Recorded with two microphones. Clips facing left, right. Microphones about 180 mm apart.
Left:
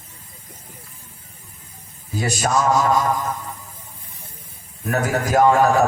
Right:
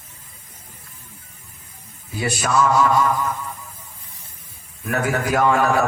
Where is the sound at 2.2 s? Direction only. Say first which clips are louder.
Right 1 dB; 40° left (ahead or behind).